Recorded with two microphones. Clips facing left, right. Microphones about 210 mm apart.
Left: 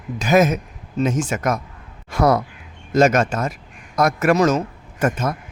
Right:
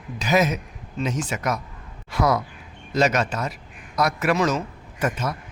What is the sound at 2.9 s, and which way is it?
A man's voice, 50° left (ahead or behind).